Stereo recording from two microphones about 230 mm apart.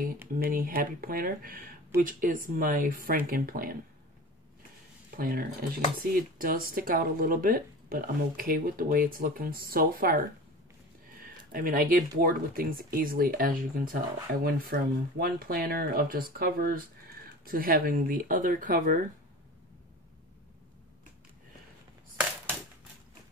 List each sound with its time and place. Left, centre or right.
0.4 s speech: right
5.1 s speech: right
11.5 s speech: right